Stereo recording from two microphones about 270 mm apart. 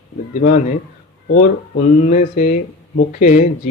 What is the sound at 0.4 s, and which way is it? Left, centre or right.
Speech, left.